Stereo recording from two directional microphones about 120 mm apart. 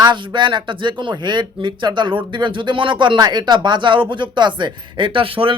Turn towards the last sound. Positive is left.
turn(degrees=-45)  # may be behind; listen again after turning